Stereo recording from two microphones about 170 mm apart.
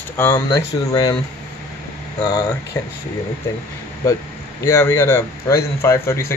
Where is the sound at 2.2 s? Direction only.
20° left (ahead or behind).